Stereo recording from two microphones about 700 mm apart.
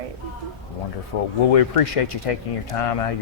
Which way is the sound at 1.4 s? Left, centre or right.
Left.